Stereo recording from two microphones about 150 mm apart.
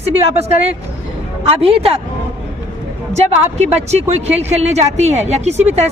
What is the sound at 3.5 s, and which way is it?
Speech, 45° right (ahead or behind).